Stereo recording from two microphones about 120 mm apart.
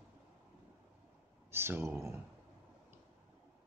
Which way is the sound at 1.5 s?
20° right (ahead or behind).